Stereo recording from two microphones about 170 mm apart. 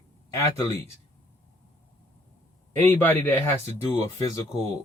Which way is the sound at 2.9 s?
10° left (ahead or behind).